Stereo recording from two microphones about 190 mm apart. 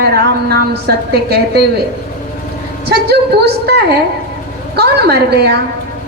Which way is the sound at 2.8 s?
60° right (ahead or behind).